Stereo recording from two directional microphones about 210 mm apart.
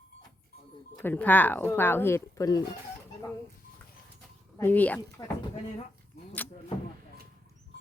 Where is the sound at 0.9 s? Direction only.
5° left (ahead or behind).